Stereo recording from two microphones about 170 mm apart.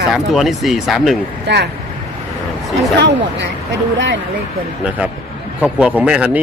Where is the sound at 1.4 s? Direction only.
75° right (ahead or behind).